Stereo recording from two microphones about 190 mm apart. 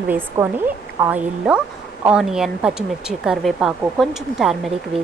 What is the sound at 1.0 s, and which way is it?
Speech, 5° right (ahead or behind).